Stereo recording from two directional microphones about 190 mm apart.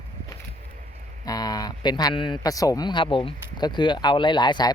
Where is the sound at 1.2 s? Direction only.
20° left (ahead or behind).